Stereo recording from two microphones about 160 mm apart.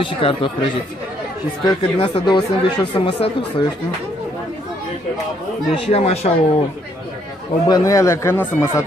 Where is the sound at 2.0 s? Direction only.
30° left (ahead or behind).